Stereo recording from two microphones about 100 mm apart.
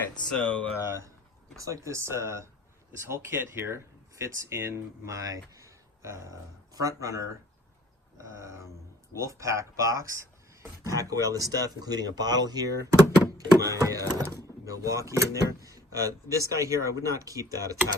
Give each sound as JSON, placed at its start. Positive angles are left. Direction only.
{"t": 0.3, "sound": "speech", "side_deg": 10}
{"t": 0.9, "sound": "speech", "side_deg": -30}